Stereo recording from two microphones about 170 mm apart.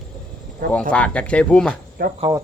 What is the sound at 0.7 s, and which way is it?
Speech, 5° left (ahead or behind).